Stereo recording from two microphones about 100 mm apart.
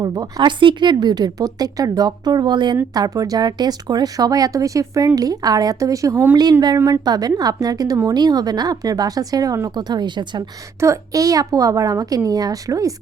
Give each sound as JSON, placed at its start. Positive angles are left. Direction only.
{"t": 0.0, "sound": "speech", "side_deg": -40}
{"t": 10.8, "sound": "speech", "side_deg": -30}